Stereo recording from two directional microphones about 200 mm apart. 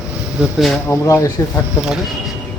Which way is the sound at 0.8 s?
15° left (ahead or behind).